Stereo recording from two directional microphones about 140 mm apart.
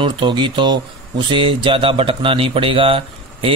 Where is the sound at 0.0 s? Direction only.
35° right (ahead or behind).